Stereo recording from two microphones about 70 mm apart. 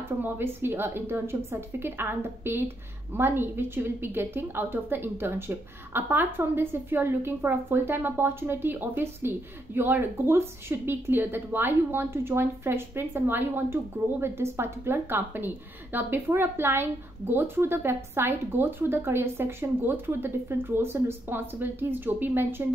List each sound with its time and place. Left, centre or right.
0.2 s a woman's voice: right